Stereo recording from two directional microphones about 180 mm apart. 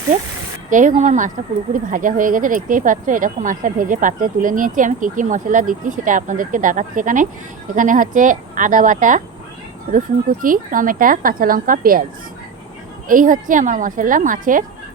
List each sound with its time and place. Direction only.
0.7 s speech: 45° right (ahead or behind)
13.1 s speech: 50° right (ahead or behind)